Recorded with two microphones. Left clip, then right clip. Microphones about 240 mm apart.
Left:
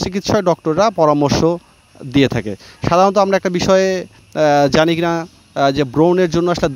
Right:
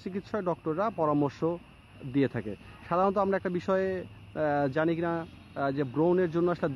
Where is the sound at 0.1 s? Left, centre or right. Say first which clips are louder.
Left 15 dB; left.